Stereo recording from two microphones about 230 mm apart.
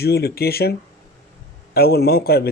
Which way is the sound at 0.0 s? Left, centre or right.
Left.